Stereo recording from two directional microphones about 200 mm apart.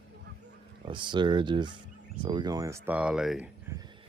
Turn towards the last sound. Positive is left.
turn(degrees=-5)  # may be behind; listen again after turning